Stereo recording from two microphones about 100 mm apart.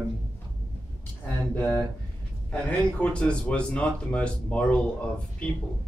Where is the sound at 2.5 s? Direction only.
15° left (ahead or behind).